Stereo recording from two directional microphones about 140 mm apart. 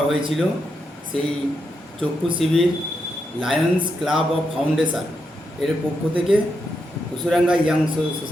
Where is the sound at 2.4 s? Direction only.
Centre (ahead or behind).